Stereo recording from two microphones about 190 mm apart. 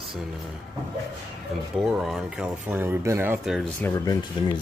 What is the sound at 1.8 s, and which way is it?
Speech, centre (ahead or behind).